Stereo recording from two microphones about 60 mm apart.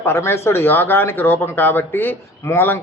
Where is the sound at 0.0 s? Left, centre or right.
Left.